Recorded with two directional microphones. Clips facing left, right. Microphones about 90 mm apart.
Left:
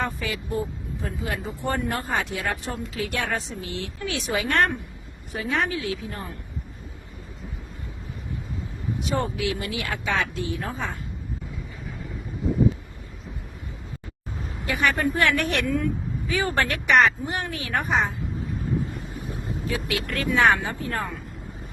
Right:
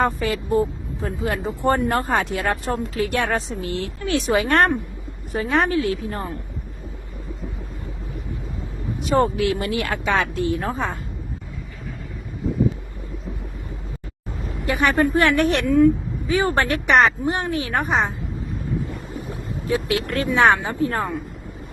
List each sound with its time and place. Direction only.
0.0 s speech: 40° right (ahead or behind)
9.0 s speech: 45° right (ahead or behind)
14.7 s a woman's voice: 30° right (ahead or behind)
19.6 s a woman's voice: 30° right (ahead or behind)